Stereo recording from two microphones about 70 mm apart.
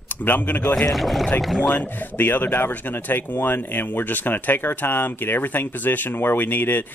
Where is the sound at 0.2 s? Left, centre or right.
Left.